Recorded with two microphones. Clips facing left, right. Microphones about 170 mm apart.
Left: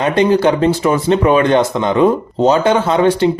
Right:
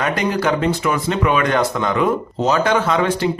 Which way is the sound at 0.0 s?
25° left (ahead or behind).